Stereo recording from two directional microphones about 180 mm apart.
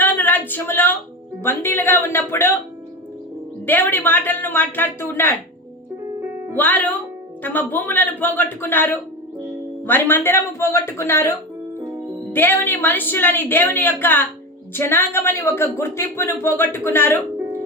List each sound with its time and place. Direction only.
0.0 s a sound: 10° left (ahead or behind)
1.4 s a woman's voice: 10° left (ahead or behind)
3.7 s a woman's voice: 10° left (ahead or behind)
6.6 s a woman's voice: 10° left (ahead or behind)